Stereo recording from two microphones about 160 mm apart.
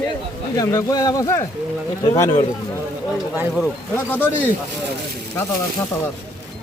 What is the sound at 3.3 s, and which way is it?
Speech, 5° right (ahead or behind).